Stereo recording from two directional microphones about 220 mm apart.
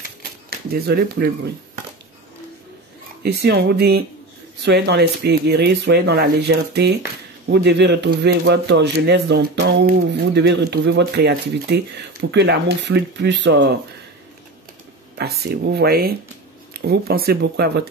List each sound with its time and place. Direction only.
0.5 s speech: 45° right (ahead or behind)
3.2 s a man's voice: 50° right (ahead or behind)
15.1 s a man's voice: 45° right (ahead or behind)